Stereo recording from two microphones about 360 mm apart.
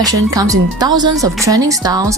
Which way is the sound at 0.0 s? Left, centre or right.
Centre.